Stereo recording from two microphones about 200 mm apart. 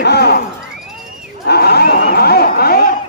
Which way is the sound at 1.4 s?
55° left (ahead or behind).